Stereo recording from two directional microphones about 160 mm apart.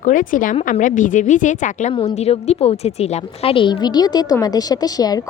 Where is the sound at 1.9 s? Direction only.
40° left (ahead or behind).